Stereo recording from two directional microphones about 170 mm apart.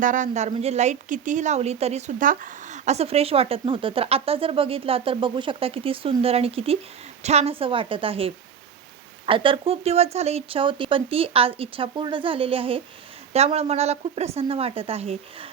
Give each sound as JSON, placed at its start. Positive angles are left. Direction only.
{"t": 0.0, "sound": "a woman's voice", "side_deg": -50}